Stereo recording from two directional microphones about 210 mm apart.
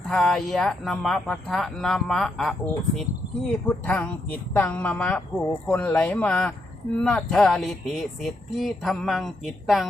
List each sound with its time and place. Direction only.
0.1 s speech: 5° left (ahead or behind)